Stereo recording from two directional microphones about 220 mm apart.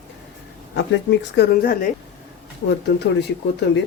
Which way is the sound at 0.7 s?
55° left (ahead or behind).